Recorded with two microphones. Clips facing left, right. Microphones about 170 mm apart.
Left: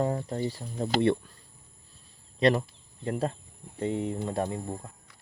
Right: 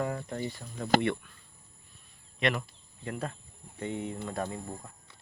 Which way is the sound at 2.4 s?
35° left (ahead or behind).